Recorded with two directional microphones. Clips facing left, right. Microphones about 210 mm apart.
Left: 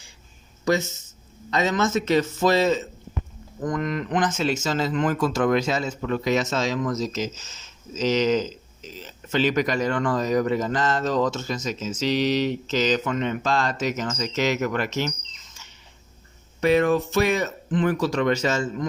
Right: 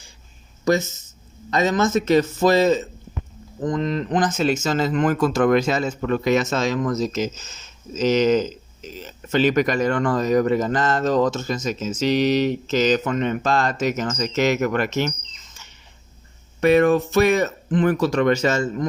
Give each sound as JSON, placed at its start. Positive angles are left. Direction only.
{"t": 1.5, "sound": "speech", "side_deg": -45}
{"t": 3.6, "sound": "speech", "side_deg": -25}
{"t": 4.6, "sound": "speech", "side_deg": -50}
{"t": 16.6, "sound": "speech", "side_deg": -55}